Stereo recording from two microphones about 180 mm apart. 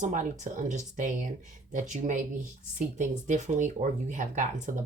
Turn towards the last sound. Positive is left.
turn(degrees=-45)  # may be behind; listen again after turning